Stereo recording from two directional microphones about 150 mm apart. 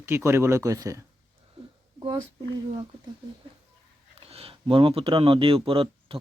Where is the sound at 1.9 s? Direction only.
25° right (ahead or behind).